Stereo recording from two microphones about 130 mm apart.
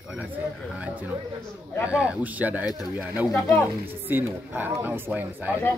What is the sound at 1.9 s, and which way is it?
Speech, 10° right (ahead or behind).